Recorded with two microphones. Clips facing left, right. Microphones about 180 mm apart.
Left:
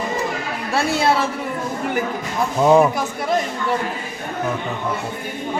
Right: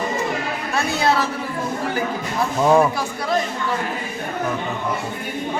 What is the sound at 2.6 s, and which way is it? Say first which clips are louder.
Speech: left 2 dB; 15° left (ahead or behind).